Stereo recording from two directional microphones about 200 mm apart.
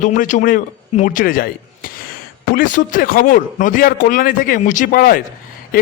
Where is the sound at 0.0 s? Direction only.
40° left (ahead or behind).